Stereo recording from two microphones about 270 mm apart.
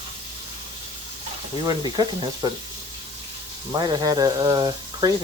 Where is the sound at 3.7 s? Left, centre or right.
Centre.